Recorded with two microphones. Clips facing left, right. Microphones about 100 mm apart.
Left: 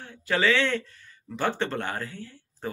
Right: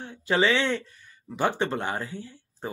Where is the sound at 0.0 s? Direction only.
20° right (ahead or behind).